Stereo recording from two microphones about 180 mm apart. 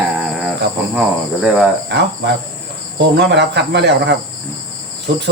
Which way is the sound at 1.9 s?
70° right (ahead or behind).